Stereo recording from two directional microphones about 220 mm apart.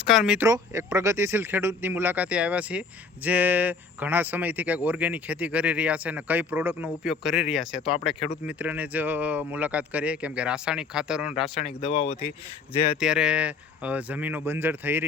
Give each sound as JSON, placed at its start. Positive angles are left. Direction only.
{"t": 0.0, "sound": "speech", "side_deg": -5}
{"t": 11.5, "sound": "speech", "side_deg": 25}
{"t": 13.0, "sound": "speech", "side_deg": -5}